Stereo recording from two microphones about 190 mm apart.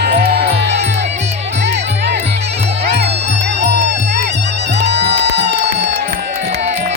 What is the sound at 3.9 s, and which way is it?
Music, 65° right (ahead or behind).